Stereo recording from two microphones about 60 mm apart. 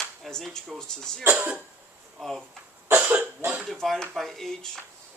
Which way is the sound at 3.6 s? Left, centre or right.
Centre.